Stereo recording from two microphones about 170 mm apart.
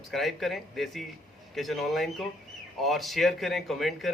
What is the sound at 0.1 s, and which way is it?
A man's voice, centre (ahead or behind).